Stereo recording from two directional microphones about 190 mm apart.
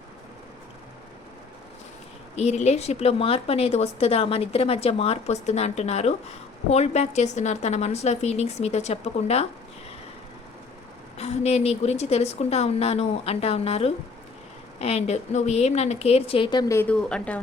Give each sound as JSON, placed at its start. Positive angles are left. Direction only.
{"t": 2.3, "sound": "a woman's voice", "side_deg": 35}
{"t": 11.2, "sound": "a woman's voice", "side_deg": 35}